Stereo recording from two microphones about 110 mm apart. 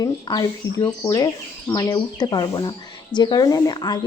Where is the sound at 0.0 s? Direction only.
35° left (ahead or behind).